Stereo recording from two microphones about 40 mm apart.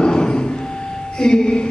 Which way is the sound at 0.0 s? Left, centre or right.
Left.